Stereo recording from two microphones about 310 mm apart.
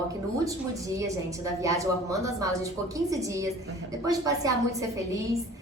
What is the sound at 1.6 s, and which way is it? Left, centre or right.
A woman's voice, centre.